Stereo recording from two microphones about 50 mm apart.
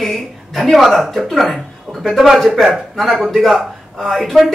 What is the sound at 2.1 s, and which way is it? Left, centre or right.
Speech, centre.